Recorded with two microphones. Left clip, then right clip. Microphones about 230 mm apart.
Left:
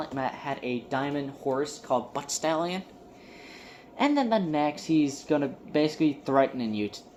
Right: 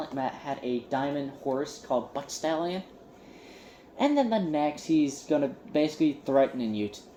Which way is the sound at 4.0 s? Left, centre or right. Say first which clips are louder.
Left 1 dB; left.